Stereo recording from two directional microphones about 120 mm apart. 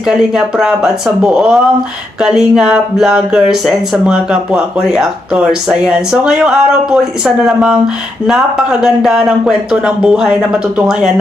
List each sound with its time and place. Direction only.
0.0 s speech: 5° right (ahead or behind)